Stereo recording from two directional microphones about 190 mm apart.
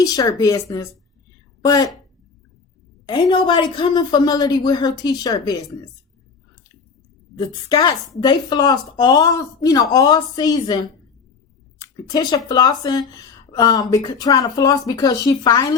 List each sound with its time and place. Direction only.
0.0 s a woman's voice: 20° left (ahead or behind)
3.1 s speech: 25° left (ahead or behind)
7.3 s speech: 20° left (ahead or behind)